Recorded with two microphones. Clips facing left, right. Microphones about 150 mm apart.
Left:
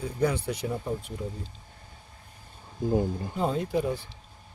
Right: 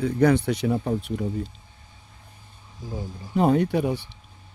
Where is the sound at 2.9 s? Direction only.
55° left (ahead or behind).